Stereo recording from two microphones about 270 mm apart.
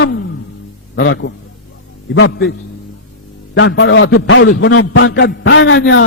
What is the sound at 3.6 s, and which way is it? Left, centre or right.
A man's voice, left.